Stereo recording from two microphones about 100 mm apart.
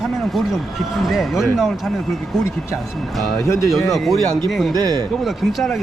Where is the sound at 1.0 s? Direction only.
Centre (ahead or behind).